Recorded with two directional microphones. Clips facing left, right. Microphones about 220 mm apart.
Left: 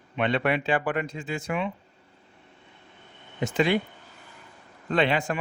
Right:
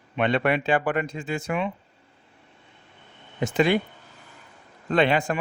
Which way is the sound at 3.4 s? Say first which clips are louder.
Right 3 dB; 50° right (ahead or behind).